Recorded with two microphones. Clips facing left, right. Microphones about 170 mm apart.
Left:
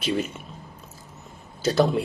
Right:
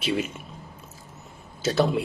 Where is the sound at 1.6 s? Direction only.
Centre (ahead or behind).